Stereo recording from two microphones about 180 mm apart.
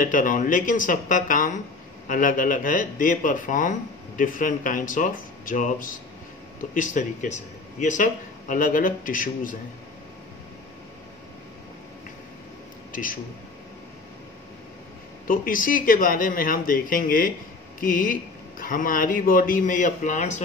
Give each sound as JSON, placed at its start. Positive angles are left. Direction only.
{"t": 0.0, "sound": "speech", "side_deg": 50}
{"t": 12.9, "sound": "speech", "side_deg": 50}
{"t": 15.2, "sound": "speech", "side_deg": 50}